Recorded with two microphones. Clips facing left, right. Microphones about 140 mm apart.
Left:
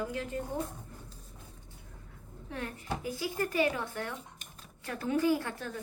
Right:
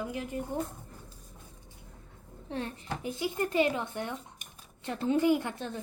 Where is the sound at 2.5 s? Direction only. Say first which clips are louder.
Right 2 dB; 30° right (ahead or behind).